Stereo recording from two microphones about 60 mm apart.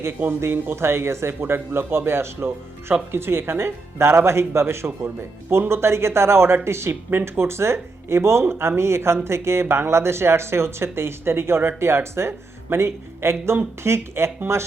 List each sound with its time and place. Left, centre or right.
0.4 s speech: right